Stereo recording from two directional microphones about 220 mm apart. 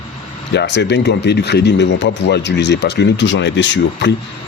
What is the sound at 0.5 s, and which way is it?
Speech, 50° left (ahead or behind).